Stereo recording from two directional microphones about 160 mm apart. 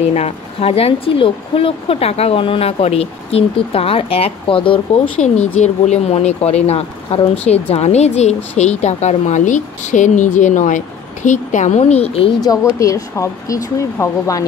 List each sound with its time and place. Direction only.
0.0 s speech: 40° left (ahead or behind)
5.2 s speech: 45° left (ahead or behind)
12.4 s speech: 20° left (ahead or behind)